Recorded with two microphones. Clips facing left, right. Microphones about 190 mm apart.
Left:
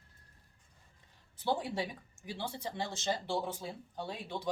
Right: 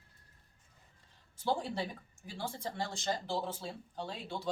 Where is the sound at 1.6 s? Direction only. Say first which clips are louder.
Left 1 dB; 15° left (ahead or behind).